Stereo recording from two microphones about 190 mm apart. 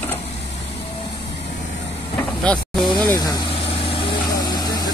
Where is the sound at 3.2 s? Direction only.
20° left (ahead or behind).